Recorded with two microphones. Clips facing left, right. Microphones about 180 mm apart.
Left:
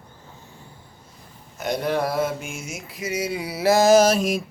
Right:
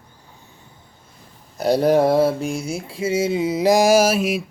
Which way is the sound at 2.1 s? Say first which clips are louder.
Right 8 dB; 35° right (ahead or behind).